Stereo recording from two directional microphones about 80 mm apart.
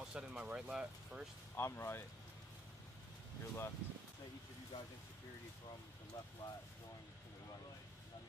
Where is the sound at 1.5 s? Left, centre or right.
Left.